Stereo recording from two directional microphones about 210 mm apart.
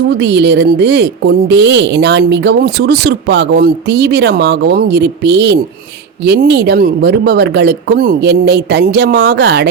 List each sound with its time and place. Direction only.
0.2 s a woman's voice: 55° right (ahead or behind)